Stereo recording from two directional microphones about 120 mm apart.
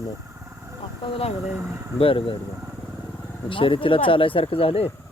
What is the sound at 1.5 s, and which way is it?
Speech, 20° right (ahead or behind).